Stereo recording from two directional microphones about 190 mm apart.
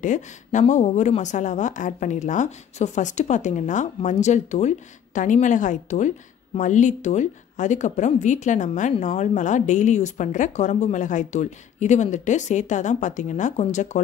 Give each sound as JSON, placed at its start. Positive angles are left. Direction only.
{"t": 0.0, "sound": "a woman's voice", "side_deg": 40}